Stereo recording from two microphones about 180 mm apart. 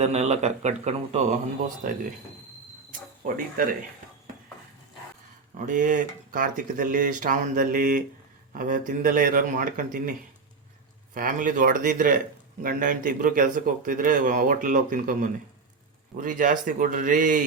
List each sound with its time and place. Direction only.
0.0 s a man's voice: 35° right (ahead or behind)
3.6 s speech: 55° right (ahead or behind)
5.5 s speech: 45° right (ahead or behind)